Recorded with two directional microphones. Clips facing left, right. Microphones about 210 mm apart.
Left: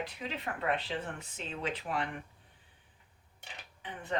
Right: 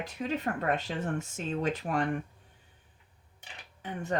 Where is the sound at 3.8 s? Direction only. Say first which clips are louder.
Right 8 dB; 45° right (ahead or behind).